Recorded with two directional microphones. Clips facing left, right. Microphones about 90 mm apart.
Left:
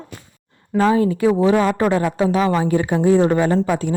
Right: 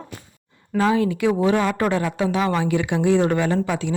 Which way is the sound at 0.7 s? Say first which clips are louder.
Left 3 dB; 35° left (ahead or behind).